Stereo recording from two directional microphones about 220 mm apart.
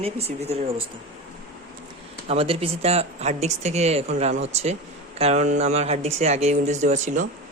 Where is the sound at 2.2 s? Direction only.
25° right (ahead or behind).